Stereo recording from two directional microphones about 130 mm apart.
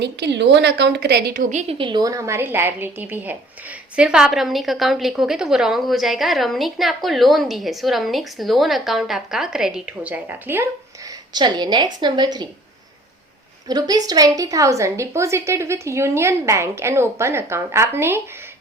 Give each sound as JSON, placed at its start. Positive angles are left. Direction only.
{"t": 1.4, "sound": "a woman's voice", "side_deg": -65}
{"t": 1.8, "sound": "a woman's voice", "side_deg": -35}
{"t": 11.3, "sound": "a woman's voice", "side_deg": -35}
{"t": 13.7, "sound": "a woman's voice", "side_deg": -30}